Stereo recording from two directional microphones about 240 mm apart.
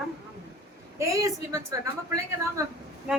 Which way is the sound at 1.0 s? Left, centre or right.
Centre.